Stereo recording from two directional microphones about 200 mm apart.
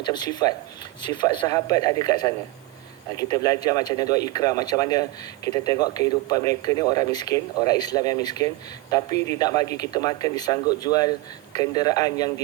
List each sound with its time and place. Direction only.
0.0 s speech: 20° left (ahead or behind)